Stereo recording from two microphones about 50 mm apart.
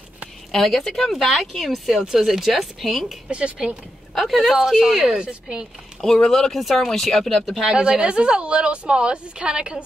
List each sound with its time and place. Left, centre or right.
0.5 s speech: centre
3.3 s speech: right
4.1 s speech: centre
4.4 s speech: centre
5.2 s a woman's voice: right
5.9 s speech: centre
7.6 s a woman's voice: centre